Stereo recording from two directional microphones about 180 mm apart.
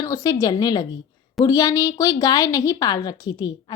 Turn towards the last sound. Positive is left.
turn(degrees=25)  # may be behind; listen again after turning